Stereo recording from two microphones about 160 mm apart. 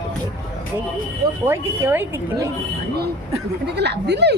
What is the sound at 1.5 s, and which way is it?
Speech, 15° right (ahead or behind).